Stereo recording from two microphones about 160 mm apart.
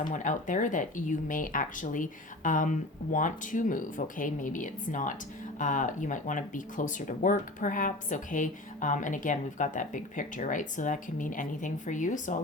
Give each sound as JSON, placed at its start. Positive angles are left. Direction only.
{"t": 0.0, "sound": "speech", "side_deg": 55}